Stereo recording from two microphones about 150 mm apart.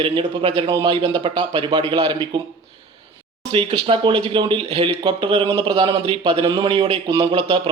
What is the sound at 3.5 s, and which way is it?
Speech, 35° right (ahead or behind).